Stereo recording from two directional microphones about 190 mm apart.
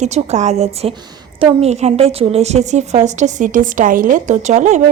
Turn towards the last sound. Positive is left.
turn(degrees=-40)  # may be behind; listen again after turning